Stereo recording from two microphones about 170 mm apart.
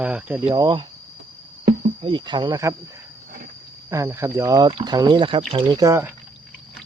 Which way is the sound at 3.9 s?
15° right (ahead or behind).